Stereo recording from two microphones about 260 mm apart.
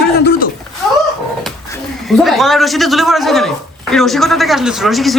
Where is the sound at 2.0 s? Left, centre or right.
Centre.